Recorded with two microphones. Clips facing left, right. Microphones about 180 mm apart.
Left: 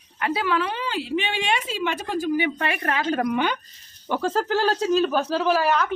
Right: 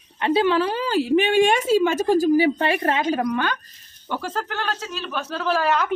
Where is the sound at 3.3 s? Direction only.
20° left (ahead or behind); by 5.4 s 35° left (ahead or behind).